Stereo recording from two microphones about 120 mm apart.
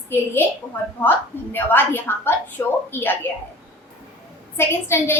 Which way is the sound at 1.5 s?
15° left (ahead or behind).